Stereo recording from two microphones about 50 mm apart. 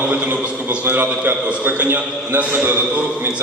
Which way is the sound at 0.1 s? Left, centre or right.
Right.